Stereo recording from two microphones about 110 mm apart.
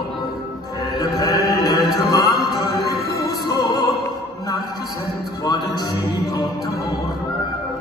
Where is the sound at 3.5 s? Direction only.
30° left (ahead or behind).